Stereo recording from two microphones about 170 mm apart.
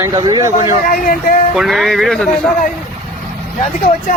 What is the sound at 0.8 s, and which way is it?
Speech, 55° left (ahead or behind).